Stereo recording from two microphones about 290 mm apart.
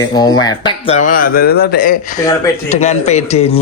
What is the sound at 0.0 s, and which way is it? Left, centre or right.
Speech, centre.